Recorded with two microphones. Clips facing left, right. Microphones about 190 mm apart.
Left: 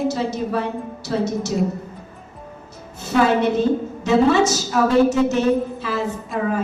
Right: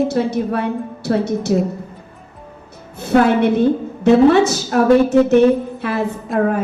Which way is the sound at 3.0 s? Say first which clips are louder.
Right 4 dB; 60° right (ahead or behind).